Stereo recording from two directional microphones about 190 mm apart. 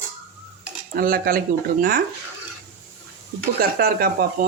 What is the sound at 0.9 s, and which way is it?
Speech, 50° right (ahead or behind).